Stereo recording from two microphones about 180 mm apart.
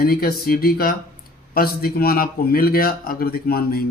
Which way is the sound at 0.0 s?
55° left (ahead or behind).